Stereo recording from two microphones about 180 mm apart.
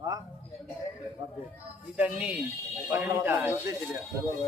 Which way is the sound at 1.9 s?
5° right (ahead or behind).